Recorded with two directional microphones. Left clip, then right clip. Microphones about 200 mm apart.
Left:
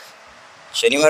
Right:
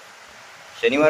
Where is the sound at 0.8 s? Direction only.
55° left (ahead or behind).